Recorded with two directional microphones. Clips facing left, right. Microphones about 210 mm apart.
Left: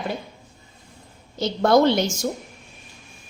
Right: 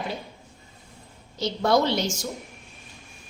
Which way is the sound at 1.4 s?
55° left (ahead or behind).